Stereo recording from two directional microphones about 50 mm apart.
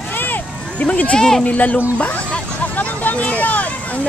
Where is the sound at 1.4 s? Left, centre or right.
Left.